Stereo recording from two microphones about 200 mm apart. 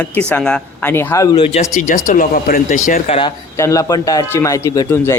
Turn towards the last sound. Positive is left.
turn(degrees=10)  # may be behind; listen again after turning